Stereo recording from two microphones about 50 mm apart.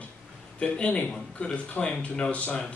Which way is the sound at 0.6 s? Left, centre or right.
Left.